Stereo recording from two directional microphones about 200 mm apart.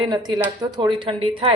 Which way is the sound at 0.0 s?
20° right (ahead or behind).